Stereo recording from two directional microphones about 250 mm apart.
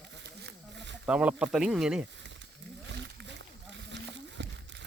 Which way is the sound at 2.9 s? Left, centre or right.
Right.